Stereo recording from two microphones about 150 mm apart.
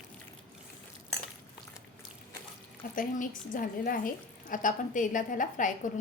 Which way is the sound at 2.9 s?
65° left (ahead or behind).